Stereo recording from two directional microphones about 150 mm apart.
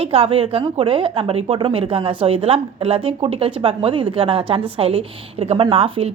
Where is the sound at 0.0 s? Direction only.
40° right (ahead or behind).